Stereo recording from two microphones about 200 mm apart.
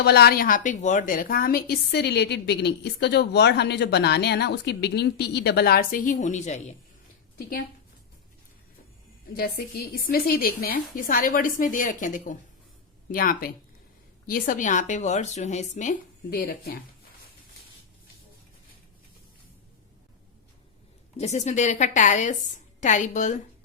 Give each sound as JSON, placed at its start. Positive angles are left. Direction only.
{"t": 0.0, "sound": "a woman's voice", "side_deg": 50}
{"t": 9.3, "sound": "a woman's voice", "side_deg": 50}
{"t": 21.2, "sound": "a woman's voice", "side_deg": 35}